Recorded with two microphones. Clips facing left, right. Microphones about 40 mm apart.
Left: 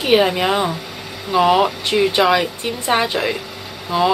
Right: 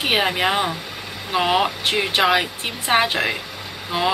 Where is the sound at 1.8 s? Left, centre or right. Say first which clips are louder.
Left 3 dB; right.